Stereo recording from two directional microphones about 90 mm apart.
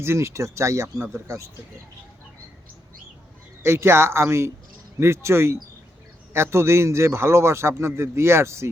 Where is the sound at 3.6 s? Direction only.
30° right (ahead or behind).